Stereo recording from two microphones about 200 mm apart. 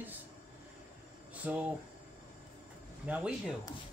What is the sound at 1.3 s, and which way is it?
Speech, 5° right (ahead or behind).